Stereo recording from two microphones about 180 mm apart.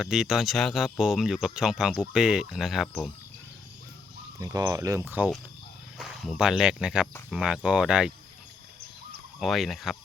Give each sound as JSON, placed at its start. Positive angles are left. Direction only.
{"t": 0.0, "sound": "speech", "side_deg": -5}
{"t": 4.4, "sound": "speech", "side_deg": -15}
{"t": 9.4, "sound": "speech", "side_deg": 0}